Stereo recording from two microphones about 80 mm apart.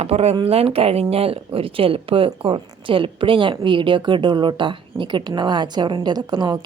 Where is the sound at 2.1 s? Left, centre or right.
Right.